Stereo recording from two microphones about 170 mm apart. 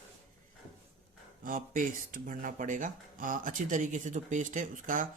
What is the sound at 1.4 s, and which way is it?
Speech, 55° right (ahead or behind).